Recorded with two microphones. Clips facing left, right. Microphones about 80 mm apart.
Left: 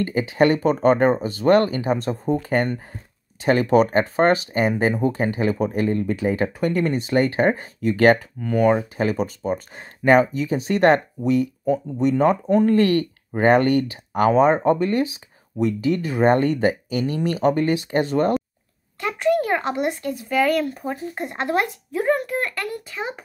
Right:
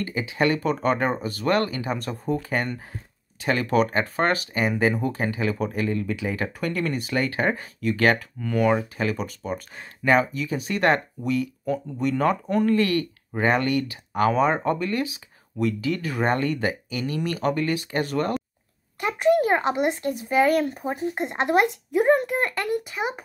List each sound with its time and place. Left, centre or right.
0.0 s speech: left
8.4 s speech: centre
18.9 s speech: right